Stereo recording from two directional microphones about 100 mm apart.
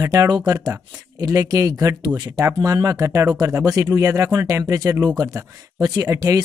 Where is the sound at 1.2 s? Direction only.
35° right (ahead or behind).